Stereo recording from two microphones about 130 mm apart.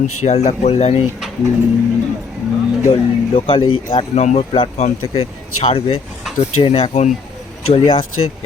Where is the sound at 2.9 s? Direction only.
40° left (ahead or behind).